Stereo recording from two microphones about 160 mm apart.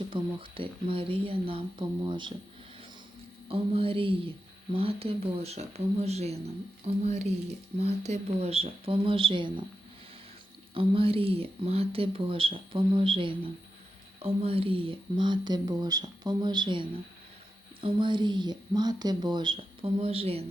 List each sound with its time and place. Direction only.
0.1 s speech: 35° right (ahead or behind)
3.5 s speech: 35° right (ahead or behind)
10.8 s speech: 35° right (ahead or behind)